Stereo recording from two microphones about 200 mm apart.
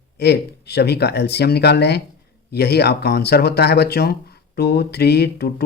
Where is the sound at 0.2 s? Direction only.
55° left (ahead or behind).